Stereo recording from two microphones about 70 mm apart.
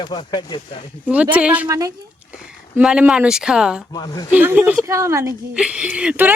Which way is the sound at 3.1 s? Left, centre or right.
Centre.